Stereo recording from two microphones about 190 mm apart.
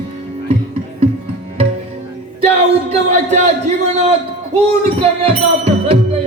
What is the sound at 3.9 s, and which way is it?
A man's voice, 35° right (ahead or behind).